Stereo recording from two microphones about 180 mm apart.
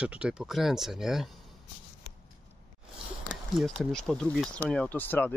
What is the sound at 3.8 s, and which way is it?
Speech, 5° left (ahead or behind).